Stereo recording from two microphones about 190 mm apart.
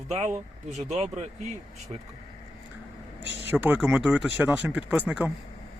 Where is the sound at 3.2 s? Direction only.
30° left (ahead or behind).